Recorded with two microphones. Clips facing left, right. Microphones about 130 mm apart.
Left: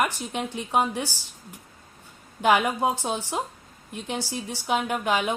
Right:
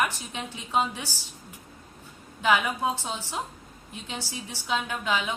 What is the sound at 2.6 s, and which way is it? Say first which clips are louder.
A woman's voice: left 4 dB; 15° left (ahead or behind).